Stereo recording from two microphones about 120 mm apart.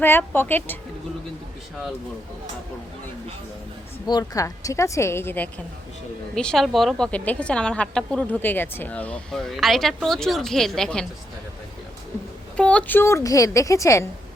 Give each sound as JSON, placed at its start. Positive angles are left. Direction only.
{"t": 0.0, "sound": "a woman's voice", "side_deg": 15}
{"t": 4.0, "sound": "a woman's voice", "side_deg": 30}
{"t": 6.3, "sound": "a woman's voice", "side_deg": 5}
{"t": 12.5, "sound": "a woman's voice", "side_deg": 10}